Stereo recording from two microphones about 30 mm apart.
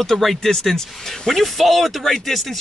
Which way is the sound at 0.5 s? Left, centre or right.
Centre.